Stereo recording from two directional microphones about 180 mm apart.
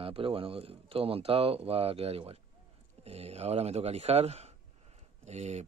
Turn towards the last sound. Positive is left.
turn(degrees=-35)  # may be behind; listen again after turning